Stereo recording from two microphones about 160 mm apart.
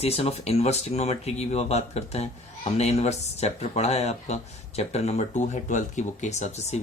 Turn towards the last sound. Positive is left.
turn(degrees=45)  # may be behind; listen again after turning